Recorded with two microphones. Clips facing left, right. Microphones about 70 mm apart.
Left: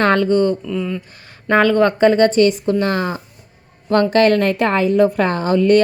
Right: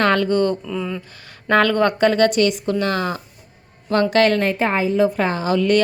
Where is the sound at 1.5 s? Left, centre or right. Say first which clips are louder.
Left 3 dB; centre.